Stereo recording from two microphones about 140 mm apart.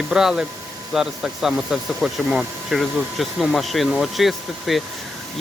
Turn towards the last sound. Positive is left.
turn(degrees=0)  # may be behind; listen again after turning